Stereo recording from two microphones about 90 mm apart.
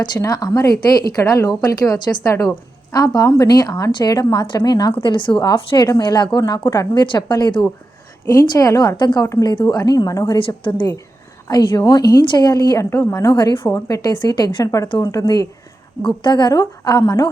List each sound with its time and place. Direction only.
0.2 s a woman's voice: 45° left (ahead or behind)
5.0 s a woman's voice: 65° left (ahead or behind)
5.7 s a woman's voice: 50° left (ahead or behind)
6.7 s a woman's voice: 45° left (ahead or behind)
7.0 s a woman's voice: 60° left (ahead or behind)
8.3 s a woman's voice: 40° left (ahead or behind)
9.0 s a woman's voice: 60° left (ahead or behind)
10.3 s a woman's voice: 70° left (ahead or behind)
11.4 s a woman's voice: 50° left (ahead or behind)
12.8 s a woman's voice: 30° left (ahead or behind)
13.2 s a woman's voice: 55° left (ahead or behind)
13.7 s a woman's voice: 45° left (ahead or behind)
16.0 s a woman's voice: 55° left (ahead or behind)